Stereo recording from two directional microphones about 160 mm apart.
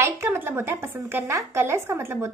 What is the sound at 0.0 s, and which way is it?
A woman's voice, 15° right (ahead or behind).